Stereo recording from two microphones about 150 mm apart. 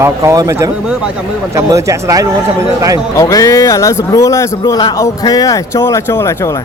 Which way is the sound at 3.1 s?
20° left (ahead or behind).